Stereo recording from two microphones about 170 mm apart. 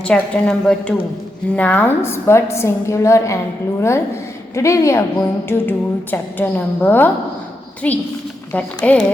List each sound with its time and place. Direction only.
0.0 s a woman's voice: 5° left (ahead or behind)